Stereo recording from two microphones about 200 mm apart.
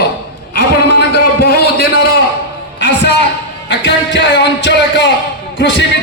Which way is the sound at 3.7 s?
60° left (ahead or behind).